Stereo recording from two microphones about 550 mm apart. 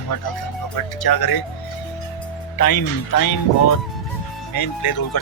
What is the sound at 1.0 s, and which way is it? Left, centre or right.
Speech, left.